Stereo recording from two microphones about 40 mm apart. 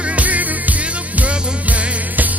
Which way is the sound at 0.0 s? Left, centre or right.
Right.